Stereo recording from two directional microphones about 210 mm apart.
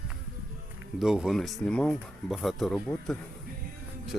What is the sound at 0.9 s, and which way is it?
Speech, 5° right (ahead or behind).